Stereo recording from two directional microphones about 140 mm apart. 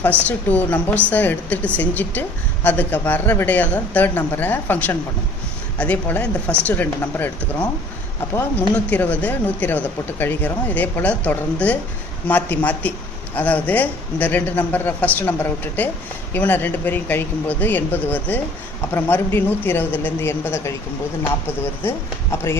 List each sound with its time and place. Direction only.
0.2 s speech: 10° left (ahead or behind)